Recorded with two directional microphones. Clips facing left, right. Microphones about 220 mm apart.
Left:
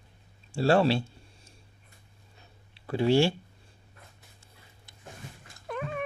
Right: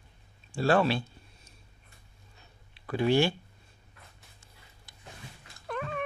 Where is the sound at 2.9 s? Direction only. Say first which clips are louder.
Left 2 dB; 30° left (ahead or behind).